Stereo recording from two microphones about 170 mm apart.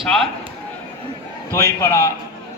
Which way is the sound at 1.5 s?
15° left (ahead or behind).